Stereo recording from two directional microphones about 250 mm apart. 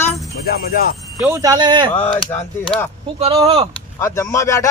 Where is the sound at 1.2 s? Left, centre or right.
Centre.